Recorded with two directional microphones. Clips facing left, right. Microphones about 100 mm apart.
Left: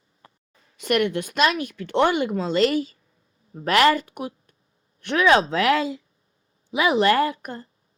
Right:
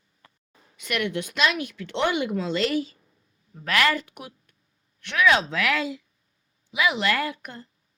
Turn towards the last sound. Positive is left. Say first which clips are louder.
# left 7 dB
turn(degrees=35)  # may be behind; listen again after turning